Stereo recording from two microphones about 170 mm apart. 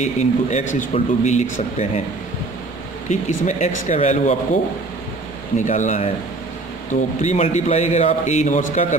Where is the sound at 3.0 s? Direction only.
45° left (ahead or behind).